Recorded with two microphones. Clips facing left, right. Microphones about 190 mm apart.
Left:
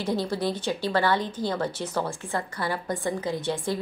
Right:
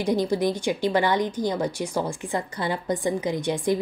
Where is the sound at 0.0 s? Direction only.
15° right (ahead or behind).